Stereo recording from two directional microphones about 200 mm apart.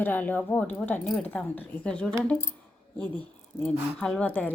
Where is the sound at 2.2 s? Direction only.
5° left (ahead or behind).